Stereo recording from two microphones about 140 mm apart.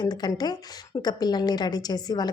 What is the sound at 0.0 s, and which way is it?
A woman's voice, 30° left (ahead or behind).